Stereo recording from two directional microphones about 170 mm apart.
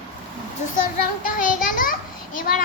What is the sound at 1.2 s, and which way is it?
A child's voice, 50° left (ahead or behind).